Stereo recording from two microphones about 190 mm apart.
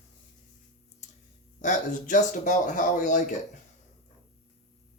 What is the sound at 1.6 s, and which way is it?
Speech, 40° left (ahead or behind).